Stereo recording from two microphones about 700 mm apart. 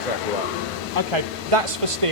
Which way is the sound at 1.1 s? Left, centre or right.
Right.